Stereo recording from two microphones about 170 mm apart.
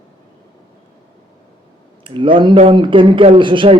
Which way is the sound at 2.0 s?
30° right (ahead or behind).